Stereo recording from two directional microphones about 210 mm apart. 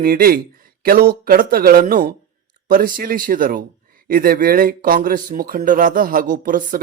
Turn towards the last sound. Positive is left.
turn(degrees=-40)  # may be behind; listen again after turning